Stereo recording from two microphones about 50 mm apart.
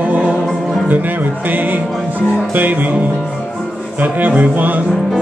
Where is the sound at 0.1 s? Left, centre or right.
Right.